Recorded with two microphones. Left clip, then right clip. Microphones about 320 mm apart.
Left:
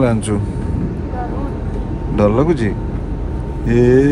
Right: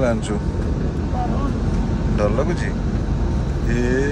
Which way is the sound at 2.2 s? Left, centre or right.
Centre.